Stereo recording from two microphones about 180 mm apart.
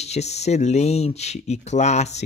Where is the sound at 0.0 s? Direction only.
35° left (ahead or behind).